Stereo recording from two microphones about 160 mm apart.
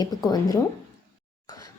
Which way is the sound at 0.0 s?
25° left (ahead or behind).